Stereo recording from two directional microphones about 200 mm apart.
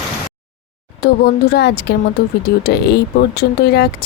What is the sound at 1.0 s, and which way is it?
A woman's voice, 55° left (ahead or behind).